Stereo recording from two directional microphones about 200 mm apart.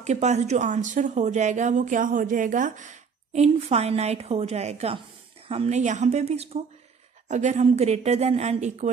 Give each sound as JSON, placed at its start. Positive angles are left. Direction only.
{"t": 0.0, "sound": "speech", "side_deg": -35}